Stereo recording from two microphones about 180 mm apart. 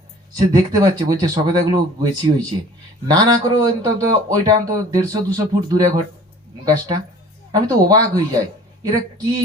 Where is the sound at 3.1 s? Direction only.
20° right (ahead or behind).